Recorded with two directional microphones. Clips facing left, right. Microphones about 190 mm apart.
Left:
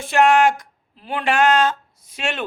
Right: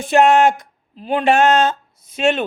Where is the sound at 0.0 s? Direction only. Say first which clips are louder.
Right 3 dB; 20° right (ahead or behind).